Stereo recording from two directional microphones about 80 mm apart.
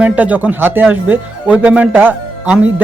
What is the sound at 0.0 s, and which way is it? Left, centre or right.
Speech, centre.